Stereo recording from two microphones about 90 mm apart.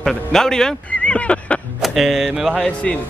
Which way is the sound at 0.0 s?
5° left (ahead or behind).